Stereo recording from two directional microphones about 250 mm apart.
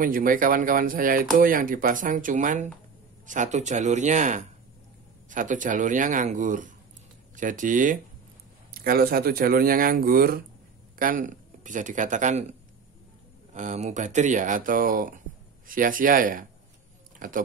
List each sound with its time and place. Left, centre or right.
0.0 s speech: right